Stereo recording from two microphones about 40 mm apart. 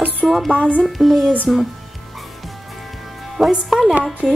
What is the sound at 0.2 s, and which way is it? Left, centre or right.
Music, centre.